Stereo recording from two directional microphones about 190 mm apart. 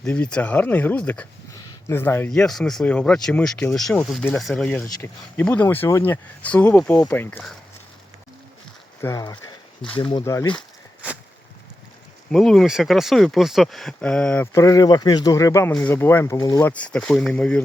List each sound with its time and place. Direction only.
0.0 s speech: 5° left (ahead or behind)
9.0 s speech: 15° left (ahead or behind)
12.3 s speech: 5° left (ahead or behind)